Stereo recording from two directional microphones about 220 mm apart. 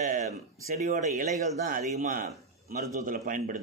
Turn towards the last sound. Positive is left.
turn(degrees=-35)  # may be behind; listen again after turning